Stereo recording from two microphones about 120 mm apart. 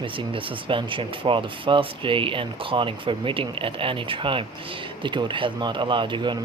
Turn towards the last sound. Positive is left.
turn(degrees=-40)  # may be behind; listen again after turning